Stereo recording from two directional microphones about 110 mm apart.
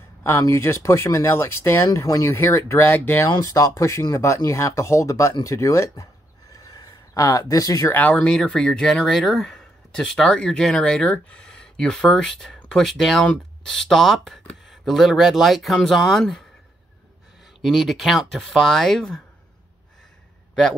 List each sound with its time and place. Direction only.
0.2 s speech: 25° left (ahead or behind)
3.3 s speech: 30° left (ahead or behind)
6.5 s a sound: 35° left (ahead or behind)
7.9 s speech: 15° left (ahead or behind)
17.6 s speech: centre (ahead or behind)